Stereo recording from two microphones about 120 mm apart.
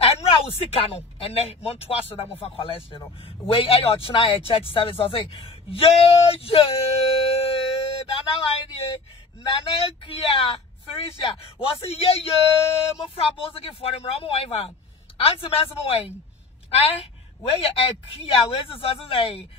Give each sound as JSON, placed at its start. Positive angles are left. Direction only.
{"t": 0.0, "sound": "speech", "side_deg": 55}
{"t": 6.8, "sound": "music", "side_deg": 55}
{"t": 9.4, "sound": "speech", "side_deg": 50}